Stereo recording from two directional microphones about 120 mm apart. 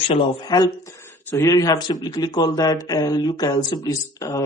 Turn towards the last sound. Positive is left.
turn(degrees=25)  # may be behind; listen again after turning